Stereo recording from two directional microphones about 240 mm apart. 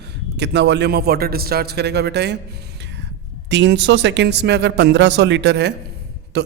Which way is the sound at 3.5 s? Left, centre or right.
Right.